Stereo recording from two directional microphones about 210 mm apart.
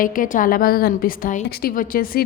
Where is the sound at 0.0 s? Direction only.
40° left (ahead or behind).